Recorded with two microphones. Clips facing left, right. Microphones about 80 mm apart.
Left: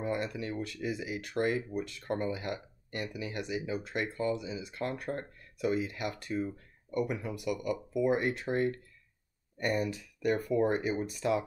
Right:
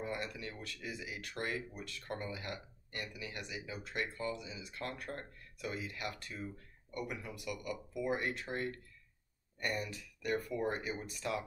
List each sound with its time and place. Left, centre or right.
0.0 s speech: left
9.8 s speech: left